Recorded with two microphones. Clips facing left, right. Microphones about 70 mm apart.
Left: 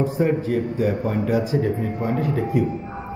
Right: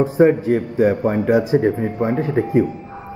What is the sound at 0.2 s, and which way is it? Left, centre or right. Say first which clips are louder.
A man's voice: right 9 dB; right.